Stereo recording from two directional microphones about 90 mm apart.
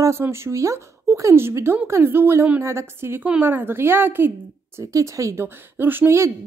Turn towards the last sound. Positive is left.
turn(degrees=-30)  # may be behind; listen again after turning